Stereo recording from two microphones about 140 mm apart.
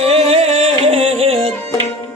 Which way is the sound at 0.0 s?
45° right (ahead or behind).